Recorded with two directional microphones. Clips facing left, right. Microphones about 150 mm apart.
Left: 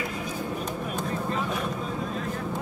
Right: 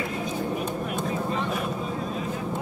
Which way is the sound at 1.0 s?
Centre (ahead or behind).